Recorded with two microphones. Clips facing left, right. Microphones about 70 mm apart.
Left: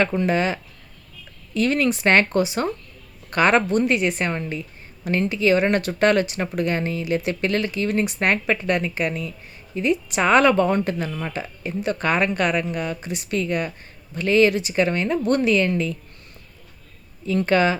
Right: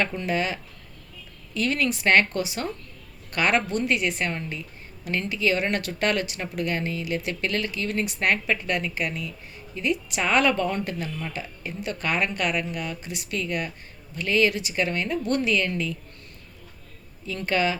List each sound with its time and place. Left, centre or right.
0.3 s speech: left
17.2 s speech: left